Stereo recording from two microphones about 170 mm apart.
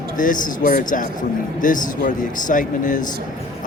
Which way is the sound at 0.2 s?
50° left (ahead or behind).